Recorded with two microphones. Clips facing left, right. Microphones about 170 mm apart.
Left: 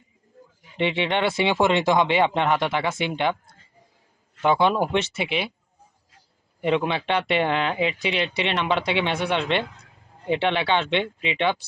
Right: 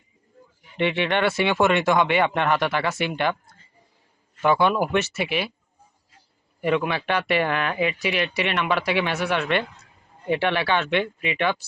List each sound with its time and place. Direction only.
0.8 s speech: 20° left (ahead or behind)
4.4 s speech: 20° left (ahead or behind)
6.6 s speech: 20° left (ahead or behind)